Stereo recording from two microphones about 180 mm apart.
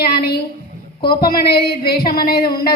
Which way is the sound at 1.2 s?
60° left (ahead or behind).